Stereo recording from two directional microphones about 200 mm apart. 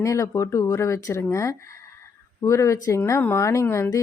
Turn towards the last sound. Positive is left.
turn(degrees=10)  # may be behind; listen again after turning